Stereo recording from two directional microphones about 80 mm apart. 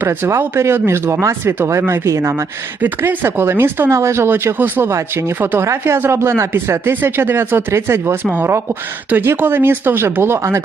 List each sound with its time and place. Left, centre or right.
0.0 s speech: right
2.8 s speech: right
4.9 s speech: right
5.4 s speech: right